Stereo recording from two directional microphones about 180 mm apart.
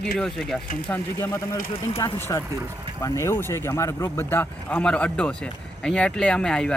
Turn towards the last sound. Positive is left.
turn(degrees=5)  # may be behind; listen again after turning